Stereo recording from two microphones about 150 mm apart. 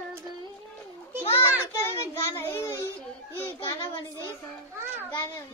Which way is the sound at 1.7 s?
20° left (ahead or behind).